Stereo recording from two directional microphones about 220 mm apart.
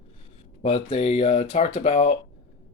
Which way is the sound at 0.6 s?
30° left (ahead or behind).